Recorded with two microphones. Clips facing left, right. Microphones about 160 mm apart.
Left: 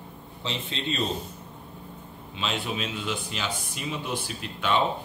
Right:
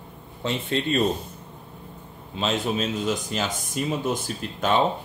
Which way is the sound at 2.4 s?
45° right (ahead or behind).